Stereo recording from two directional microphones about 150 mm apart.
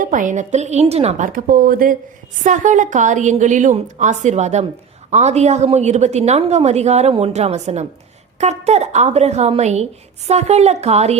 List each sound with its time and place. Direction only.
0.0 s a woman's voice: 60° right (ahead or behind); by 1.3 s 45° right (ahead or behind)
1.3 s speech: 70° right (ahead or behind)
2.4 s a woman's voice: 55° right (ahead or behind)